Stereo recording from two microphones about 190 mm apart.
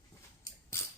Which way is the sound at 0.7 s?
10° left (ahead or behind).